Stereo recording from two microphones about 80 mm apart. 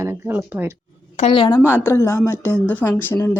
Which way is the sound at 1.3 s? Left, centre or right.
Left.